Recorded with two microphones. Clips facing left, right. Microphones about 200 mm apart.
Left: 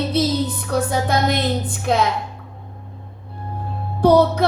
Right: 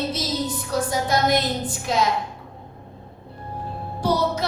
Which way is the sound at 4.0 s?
60° left (ahead or behind).